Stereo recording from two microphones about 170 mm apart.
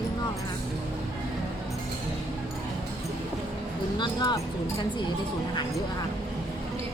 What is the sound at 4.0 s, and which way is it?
Speech, 25° left (ahead or behind).